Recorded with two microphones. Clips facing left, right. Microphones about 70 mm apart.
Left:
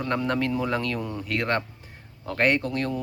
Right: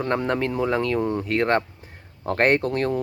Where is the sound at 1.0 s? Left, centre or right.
Right.